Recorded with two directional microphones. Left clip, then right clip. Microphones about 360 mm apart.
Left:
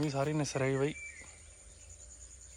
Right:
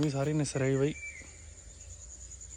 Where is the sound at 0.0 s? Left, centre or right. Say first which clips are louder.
Right 2 dB; centre.